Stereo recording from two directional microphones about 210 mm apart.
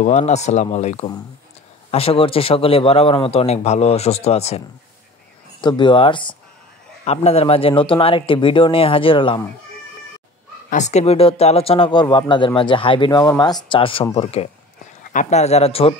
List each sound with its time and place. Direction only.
0.0 s speech: 30° left (ahead or behind)
10.7 s speech: 35° left (ahead or behind)